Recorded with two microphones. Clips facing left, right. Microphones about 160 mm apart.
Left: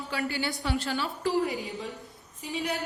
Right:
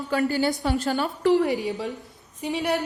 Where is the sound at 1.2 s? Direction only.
75° right (ahead or behind).